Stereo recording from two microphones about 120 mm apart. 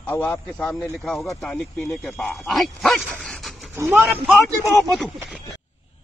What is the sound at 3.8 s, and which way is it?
Speech, 20° right (ahead or behind).